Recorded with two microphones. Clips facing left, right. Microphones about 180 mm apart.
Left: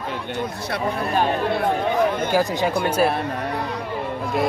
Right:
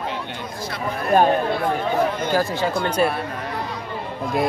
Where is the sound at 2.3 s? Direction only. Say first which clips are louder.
Left 1 dB; 15° left (ahead or behind).